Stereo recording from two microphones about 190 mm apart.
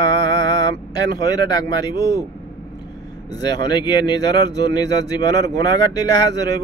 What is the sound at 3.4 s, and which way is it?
A man's voice, 20° left (ahead or behind).